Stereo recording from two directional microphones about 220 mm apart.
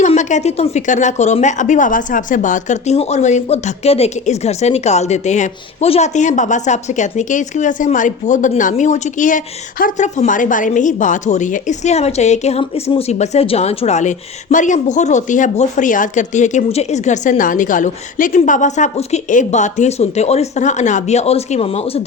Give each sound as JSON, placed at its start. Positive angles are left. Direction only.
{"t": 0.0, "sound": "speech", "side_deg": 35}